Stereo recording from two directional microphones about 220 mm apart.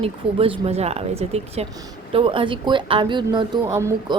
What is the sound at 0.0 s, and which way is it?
Speech, 25° right (ahead or behind).